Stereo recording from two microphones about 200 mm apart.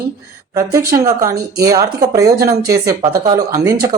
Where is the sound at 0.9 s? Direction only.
15° right (ahead or behind).